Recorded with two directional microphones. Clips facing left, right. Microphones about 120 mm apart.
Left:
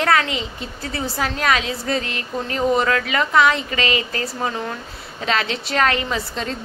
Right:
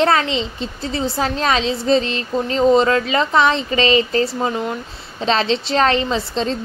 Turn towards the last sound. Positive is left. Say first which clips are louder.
# right 5 dB
turn(degrees=-25)  # may be behind; listen again after turning